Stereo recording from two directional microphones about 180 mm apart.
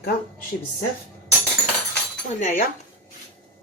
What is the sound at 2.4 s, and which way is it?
Speech, 50° left (ahead or behind).